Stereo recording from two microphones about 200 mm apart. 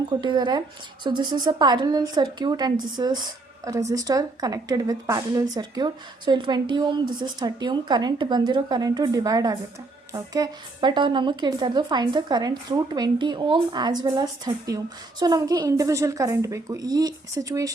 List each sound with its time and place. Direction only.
0.1 s speech: 20° right (ahead or behind)